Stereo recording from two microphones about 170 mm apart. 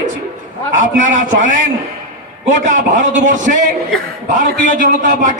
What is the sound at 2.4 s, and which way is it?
A man's voice, 45° right (ahead or behind).